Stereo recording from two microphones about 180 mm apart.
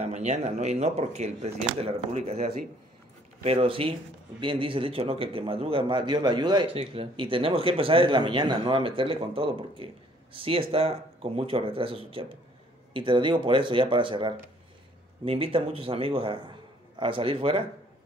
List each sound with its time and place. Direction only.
0.0 s speech: 40° right (ahead or behind)
3.4 s a man's voice: 30° right (ahead or behind)